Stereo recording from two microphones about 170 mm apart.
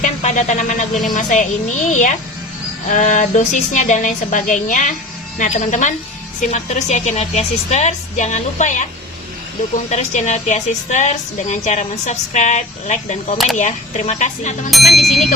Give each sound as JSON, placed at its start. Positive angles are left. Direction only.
{"t": 0.0, "sound": "a woman's voice", "side_deg": 45}
{"t": 9.9, "sound": "a woman's voice", "side_deg": 45}
{"t": 14.7, "sound": "speech", "side_deg": 0}